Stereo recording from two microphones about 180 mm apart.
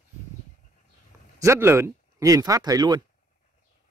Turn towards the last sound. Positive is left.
turn(degrees=-20)  # may be behind; listen again after turning